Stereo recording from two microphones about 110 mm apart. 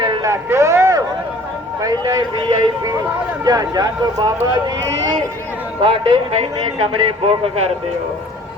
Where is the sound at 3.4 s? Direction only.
35° right (ahead or behind).